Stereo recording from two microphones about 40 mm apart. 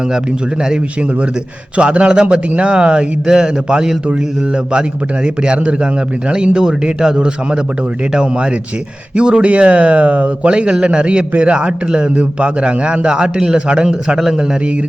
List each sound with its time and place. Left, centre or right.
1.7 s speech: right
14.2 s a man's voice: centre